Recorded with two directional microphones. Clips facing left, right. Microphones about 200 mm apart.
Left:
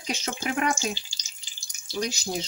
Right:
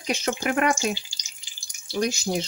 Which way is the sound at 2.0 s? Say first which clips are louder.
Right 5 dB; 55° right (ahead or behind).